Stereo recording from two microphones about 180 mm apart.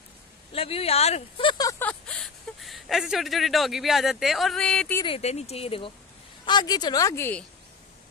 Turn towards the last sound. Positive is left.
turn(degrees=10)  # may be behind; listen again after turning